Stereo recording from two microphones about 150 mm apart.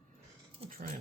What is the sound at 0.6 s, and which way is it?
Dog, 40° right (ahead or behind).